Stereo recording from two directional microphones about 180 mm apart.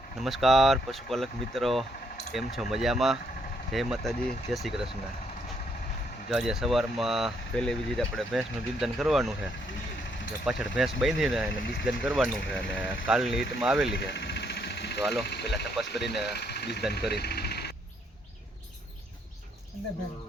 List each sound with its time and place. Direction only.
0.2 s speech: centre (ahead or behind)
6.3 s speech: centre (ahead or behind)
10.4 s speech: centre (ahead or behind)
13.9 s a sound: 70° left (ahead or behind)
15.1 s speech: 70° left (ahead or behind)